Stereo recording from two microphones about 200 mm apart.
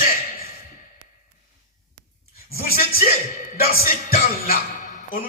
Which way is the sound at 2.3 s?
45° left (ahead or behind).